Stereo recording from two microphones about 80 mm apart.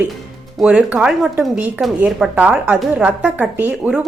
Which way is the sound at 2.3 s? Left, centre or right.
Centre.